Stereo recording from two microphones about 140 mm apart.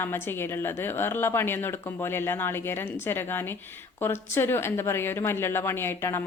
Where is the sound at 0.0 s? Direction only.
15° left (ahead or behind).